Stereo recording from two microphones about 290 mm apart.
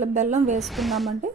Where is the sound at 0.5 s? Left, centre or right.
Centre.